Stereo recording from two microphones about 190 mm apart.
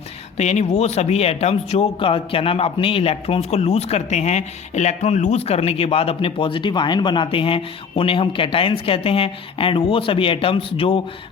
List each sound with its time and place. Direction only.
0.3 s a man's voice: 35° left (ahead or behind)